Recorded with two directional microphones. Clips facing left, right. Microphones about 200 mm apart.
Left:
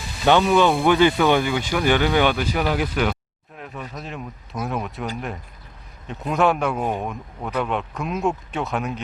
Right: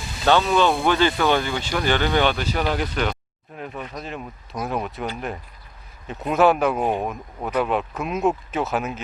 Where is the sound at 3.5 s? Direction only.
Centre (ahead or behind).